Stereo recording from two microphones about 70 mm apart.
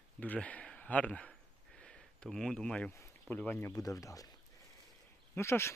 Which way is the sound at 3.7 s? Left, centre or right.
Left.